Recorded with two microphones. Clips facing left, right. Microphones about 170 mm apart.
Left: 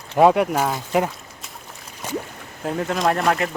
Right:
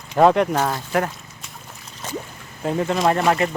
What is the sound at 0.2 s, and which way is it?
Speech, 5° left (ahead or behind).